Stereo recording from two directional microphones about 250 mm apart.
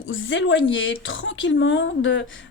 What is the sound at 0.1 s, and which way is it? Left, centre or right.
A woman's voice, left.